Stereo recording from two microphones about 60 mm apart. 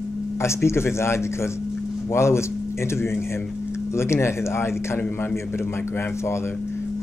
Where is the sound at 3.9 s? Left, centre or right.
Left.